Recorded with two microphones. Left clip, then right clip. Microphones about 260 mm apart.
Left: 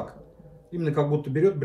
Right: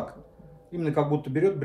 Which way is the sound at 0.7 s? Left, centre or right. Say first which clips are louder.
Even; centre.